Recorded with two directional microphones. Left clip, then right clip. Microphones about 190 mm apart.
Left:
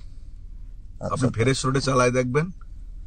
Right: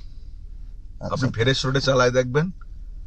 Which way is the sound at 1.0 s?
20° left (ahead or behind).